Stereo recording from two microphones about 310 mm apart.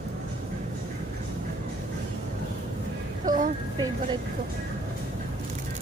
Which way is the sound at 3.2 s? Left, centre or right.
Right.